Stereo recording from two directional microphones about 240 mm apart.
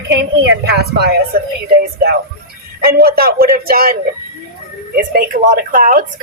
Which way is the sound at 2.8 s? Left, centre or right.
Right.